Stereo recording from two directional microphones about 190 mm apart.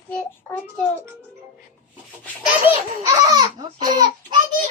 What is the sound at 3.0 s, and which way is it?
Speech, 20° right (ahead or behind).